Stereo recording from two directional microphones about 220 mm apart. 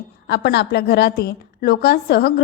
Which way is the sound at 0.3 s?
45° left (ahead or behind).